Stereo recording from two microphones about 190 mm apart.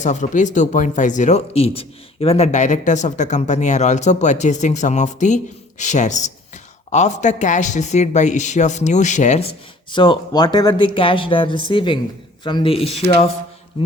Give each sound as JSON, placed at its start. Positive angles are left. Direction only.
{"t": 0.0, "sound": "speech", "side_deg": 40}
{"t": 9.9, "sound": "speech", "side_deg": 25}